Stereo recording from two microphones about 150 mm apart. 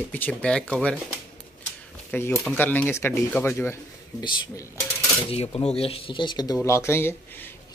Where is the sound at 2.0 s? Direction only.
15° left (ahead or behind).